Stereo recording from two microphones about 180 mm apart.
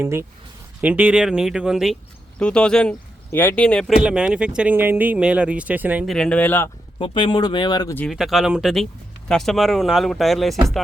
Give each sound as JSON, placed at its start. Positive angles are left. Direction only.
{"t": 0.0, "sound": "speech", "side_deg": -15}
{"t": 6.1, "sound": "speech", "side_deg": 5}
{"t": 7.0, "sound": "speech", "side_deg": 30}
{"t": 7.9, "sound": "speech", "side_deg": 0}